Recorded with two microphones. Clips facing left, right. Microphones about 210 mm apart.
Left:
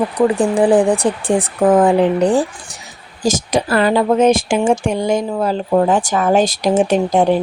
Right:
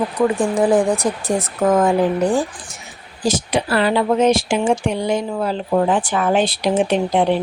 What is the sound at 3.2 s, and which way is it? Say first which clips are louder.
Speech: left 2 dB; 45° left (ahead or behind).